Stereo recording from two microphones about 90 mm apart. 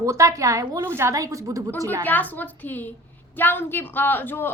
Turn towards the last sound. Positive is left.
turn(degrees=25)  # may be behind; listen again after turning